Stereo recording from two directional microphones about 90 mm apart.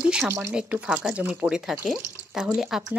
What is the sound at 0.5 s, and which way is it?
Speech, 15° right (ahead or behind).